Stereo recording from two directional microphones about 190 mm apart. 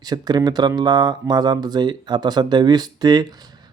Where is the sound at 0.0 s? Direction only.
20° right (ahead or behind).